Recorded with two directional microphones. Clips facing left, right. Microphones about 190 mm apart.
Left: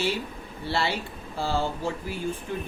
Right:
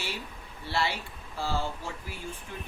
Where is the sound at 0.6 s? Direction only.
30° left (ahead or behind).